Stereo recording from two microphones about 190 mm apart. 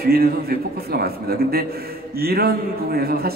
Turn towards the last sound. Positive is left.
turn(degrees=-55)  # may be behind; listen again after turning